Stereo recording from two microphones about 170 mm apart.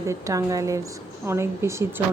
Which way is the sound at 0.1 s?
20° right (ahead or behind).